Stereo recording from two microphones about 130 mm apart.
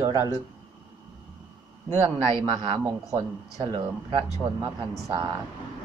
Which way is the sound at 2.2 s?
40° right (ahead or behind).